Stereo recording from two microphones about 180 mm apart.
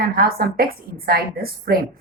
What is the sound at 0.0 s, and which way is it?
A woman's voice, 55° right (ahead or behind).